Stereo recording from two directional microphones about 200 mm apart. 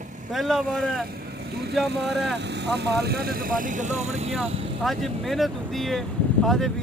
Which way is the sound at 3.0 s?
50° right (ahead or behind).